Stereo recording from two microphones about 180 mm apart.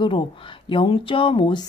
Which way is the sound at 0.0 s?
30° left (ahead or behind).